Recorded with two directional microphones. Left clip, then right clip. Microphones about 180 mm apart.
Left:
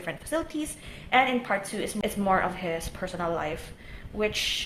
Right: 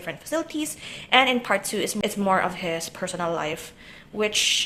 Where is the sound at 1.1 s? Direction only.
35° right (ahead or behind).